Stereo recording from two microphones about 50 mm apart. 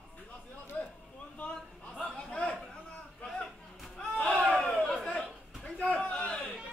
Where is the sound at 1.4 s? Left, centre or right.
Left.